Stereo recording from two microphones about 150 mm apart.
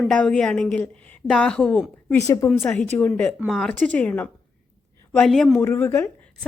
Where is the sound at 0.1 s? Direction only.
5° left (ahead or behind).